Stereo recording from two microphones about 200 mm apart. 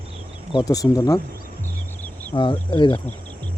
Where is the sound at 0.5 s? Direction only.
15° left (ahead or behind).